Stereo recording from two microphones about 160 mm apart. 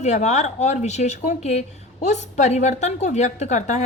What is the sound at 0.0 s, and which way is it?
Speech, 45° left (ahead or behind).